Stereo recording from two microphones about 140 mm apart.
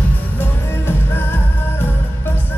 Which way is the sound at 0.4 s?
15° left (ahead or behind).